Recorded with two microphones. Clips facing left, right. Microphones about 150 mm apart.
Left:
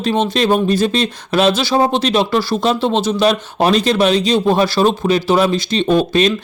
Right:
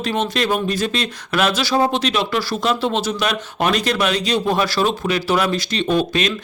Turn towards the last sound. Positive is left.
turn(degrees=35)  # may be behind; listen again after turning